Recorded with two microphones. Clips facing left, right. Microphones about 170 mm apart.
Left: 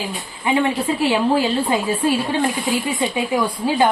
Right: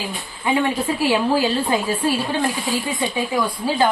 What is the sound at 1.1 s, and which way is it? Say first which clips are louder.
Speech: even; 25° left (ahead or behind).